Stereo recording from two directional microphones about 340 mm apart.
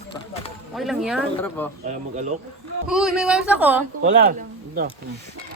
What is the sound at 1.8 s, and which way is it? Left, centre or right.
Speech, right.